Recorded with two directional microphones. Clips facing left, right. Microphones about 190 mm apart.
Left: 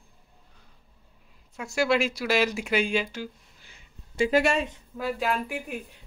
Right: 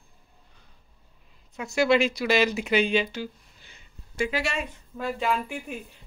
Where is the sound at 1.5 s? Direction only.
5° left (ahead or behind).